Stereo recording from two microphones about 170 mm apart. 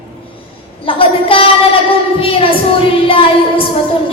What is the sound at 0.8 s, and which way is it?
Speech, 30° left (ahead or behind).